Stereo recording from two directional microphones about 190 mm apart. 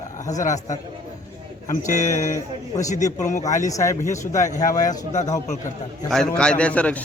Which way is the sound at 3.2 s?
40° left (ahead or behind).